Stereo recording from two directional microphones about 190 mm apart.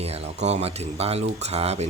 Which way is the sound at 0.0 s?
35° right (ahead or behind).